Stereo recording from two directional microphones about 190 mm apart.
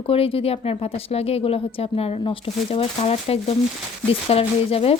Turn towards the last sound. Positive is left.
turn(degrees=30)  # may be behind; listen again after turning